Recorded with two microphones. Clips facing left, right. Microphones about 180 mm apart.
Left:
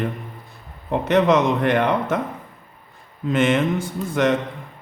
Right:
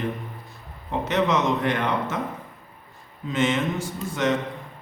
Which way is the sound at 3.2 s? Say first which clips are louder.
Left 5 dB; 60° left (ahead or behind).